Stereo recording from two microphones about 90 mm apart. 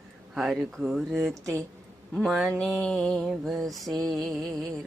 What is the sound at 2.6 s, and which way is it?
Mantra, 10° left (ahead or behind).